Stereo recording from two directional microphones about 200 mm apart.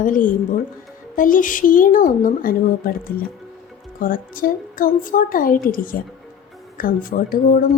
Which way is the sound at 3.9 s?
45° left (ahead or behind).